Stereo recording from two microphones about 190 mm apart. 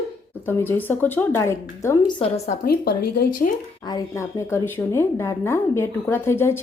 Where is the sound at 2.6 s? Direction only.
55° left (ahead or behind).